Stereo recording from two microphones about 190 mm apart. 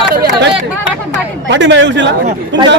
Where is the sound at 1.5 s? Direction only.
70° right (ahead or behind).